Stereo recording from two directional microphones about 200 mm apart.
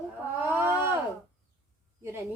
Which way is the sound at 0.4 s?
10° right (ahead or behind).